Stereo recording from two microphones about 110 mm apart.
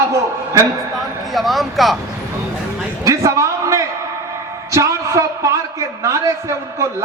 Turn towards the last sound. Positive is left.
turn(degrees=-25)  # may be behind; listen again after turning